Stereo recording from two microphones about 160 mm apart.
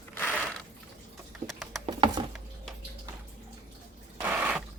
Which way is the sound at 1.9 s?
25° right (ahead or behind).